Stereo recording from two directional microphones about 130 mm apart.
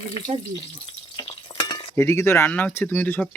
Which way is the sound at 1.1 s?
40° left (ahead or behind).